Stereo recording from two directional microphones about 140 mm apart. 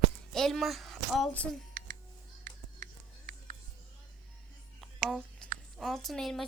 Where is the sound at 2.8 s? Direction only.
85° right.